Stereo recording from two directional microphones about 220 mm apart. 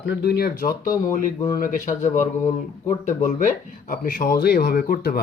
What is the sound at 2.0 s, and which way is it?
Speech, 35° left (ahead or behind).